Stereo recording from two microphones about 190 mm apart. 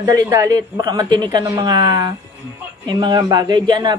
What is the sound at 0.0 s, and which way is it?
Speech, 15° right (ahead or behind).